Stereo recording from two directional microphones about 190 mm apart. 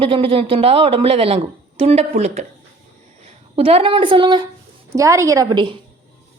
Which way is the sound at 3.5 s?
30° right (ahead or behind).